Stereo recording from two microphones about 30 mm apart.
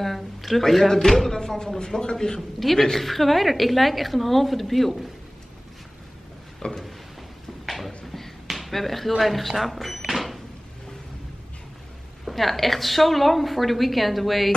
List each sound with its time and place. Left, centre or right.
0.0 s a man's voice: centre; by 2.4 s left
2.6 s a woman's voice: centre
6.6 s a man's voice: left
7.6 s a sound: centre
12.3 s a woman's voice: centre